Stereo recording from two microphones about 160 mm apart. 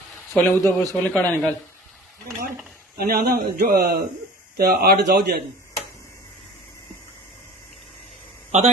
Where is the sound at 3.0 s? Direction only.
70° right (ahead or behind).